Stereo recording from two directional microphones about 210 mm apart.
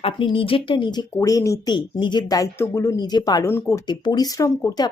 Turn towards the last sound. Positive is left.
turn(degrees=15)  # may be behind; listen again after turning